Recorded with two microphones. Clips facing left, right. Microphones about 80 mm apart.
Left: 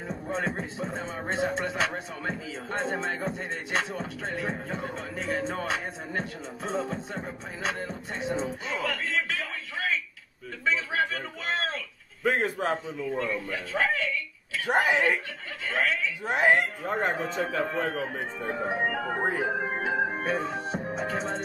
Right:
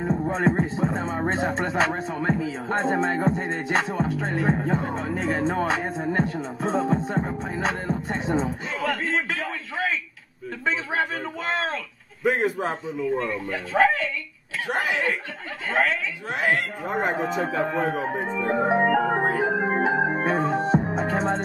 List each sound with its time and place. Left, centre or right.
0.0 s music: right
8.8 s a sound: right
10.6 s music: right
12.2 s a man's voice: centre
13.2 s music: right
14.7 s speech: left
15.7 s speech: right
16.3 s speech: left
16.8 s speech: centre
17.2 s music: right
17.7 s speech: centre
18.2 s speech: right
19.8 s organ: right
20.2 s music: right